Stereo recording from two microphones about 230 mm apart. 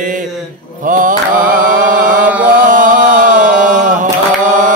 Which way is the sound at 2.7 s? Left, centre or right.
Right.